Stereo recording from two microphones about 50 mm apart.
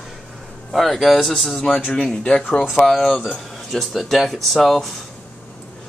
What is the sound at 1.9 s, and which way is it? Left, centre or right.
Speech, centre.